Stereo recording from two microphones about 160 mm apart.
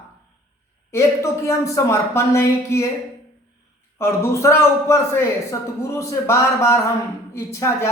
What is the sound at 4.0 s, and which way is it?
Speech, 15° left (ahead or behind).